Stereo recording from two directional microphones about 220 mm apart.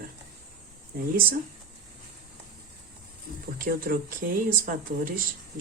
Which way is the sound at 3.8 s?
40° right (ahead or behind).